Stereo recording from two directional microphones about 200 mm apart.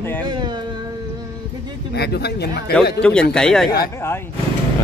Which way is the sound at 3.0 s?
5° left (ahead or behind).